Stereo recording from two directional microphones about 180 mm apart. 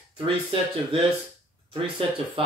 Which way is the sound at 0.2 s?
30° right (ahead or behind).